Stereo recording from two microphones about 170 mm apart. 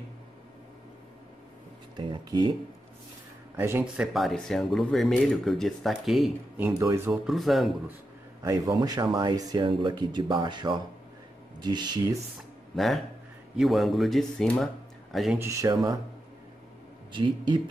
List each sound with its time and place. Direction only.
2.0 s speech: 25° right (ahead or behind)
3.5 s speech: 15° right (ahead or behind)
8.4 s speech: 20° right (ahead or behind)
12.7 s speech: centre (ahead or behind)
15.3 s speech: 15° right (ahead or behind)
17.1 s speech: 25° right (ahead or behind)